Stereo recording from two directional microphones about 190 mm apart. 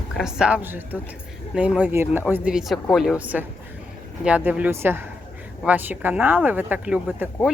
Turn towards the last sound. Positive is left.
turn(degrees=-5)  # may be behind; listen again after turning